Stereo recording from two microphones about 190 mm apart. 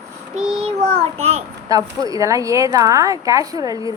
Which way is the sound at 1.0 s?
35° right (ahead or behind).